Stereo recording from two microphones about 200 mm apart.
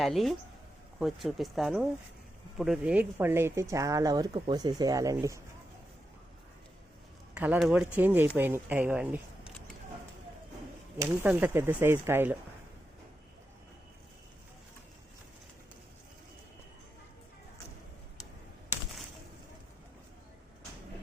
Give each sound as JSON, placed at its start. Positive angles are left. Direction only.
{"t": 0.0, "sound": "speech", "side_deg": 0}
{"t": 7.3, "sound": "speech", "side_deg": -5}
{"t": 10.9, "sound": "speech", "side_deg": -10}